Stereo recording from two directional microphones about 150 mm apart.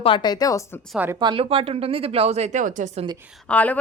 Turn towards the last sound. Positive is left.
turn(degrees=10)  # may be behind; listen again after turning